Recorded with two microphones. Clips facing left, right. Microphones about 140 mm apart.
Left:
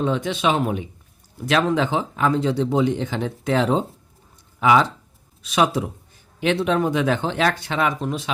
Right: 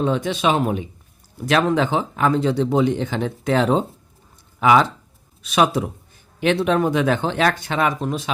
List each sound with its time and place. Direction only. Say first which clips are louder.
0.0 s speech: right 1 dB; 40° right (ahead or behind)
1.5 s speech: right 2 dB; 50° right (ahead or behind)